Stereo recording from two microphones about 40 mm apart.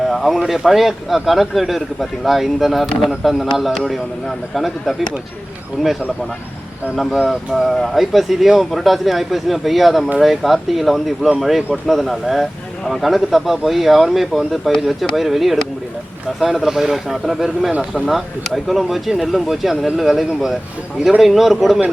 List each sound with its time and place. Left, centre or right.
0.1 s speech: centre
7.1 s speech: centre
17.7 s speech: right
18.1 s speech: centre